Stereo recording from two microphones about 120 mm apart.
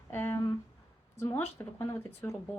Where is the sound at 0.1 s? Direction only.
20° left (ahead or behind).